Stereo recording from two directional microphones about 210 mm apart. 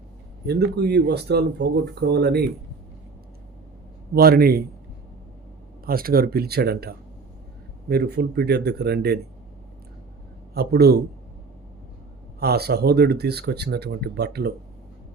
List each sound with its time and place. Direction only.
0.4 s speech: 50° right (ahead or behind)
4.1 s speech: 45° right (ahead or behind)
5.8 s speech: 45° right (ahead or behind)
10.5 s speech: 50° right (ahead or behind)
12.4 s speech: 50° right (ahead or behind)